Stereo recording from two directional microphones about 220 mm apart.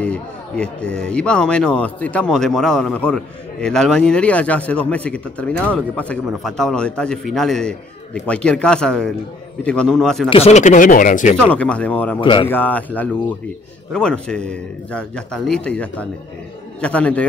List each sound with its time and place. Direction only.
0.0 s a man's voice: 5° left (ahead or behind)
10.3 s speech: 30° left (ahead or behind)
11.4 s a man's voice: 5° left (ahead or behind)
12.2 s speech: 20° left (ahead or behind)
12.4 s a man's voice: 10° left (ahead or behind)